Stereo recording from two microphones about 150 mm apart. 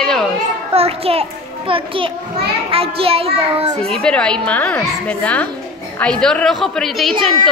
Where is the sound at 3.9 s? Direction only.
5° left (ahead or behind).